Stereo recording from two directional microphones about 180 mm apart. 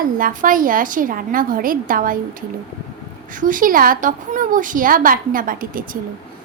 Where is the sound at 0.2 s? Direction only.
50° right (ahead or behind).